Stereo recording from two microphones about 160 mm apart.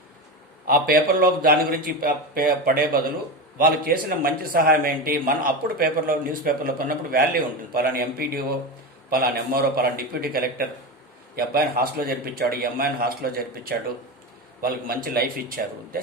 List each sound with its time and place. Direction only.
0.7 s a man's voice: 65° right (ahead or behind)